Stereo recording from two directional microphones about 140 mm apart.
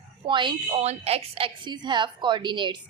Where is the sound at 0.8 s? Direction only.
45° right (ahead or behind).